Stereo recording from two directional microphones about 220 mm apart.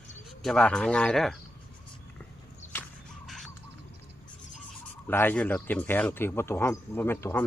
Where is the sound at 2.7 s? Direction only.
10° left (ahead or behind).